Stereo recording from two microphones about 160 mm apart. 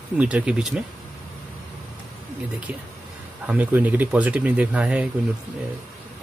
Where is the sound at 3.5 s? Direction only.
10° right (ahead or behind).